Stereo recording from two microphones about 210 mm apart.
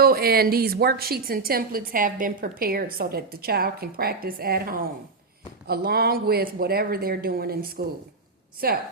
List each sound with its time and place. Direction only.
0.0 s a woman's voice: 45° right (ahead or behind)